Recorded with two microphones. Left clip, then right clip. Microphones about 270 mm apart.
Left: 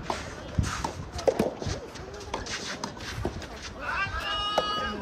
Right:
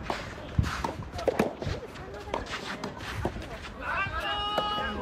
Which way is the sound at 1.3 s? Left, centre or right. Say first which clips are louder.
Left 2 dB; left.